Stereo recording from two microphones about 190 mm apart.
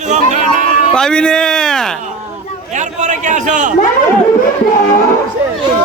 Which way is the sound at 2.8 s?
40° right (ahead or behind).